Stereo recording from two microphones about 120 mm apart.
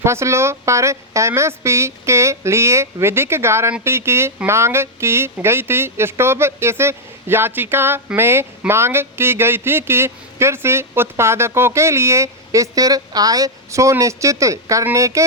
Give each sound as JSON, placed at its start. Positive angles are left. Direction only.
{"t": 0.0, "sound": "a woman's voice", "side_deg": -25}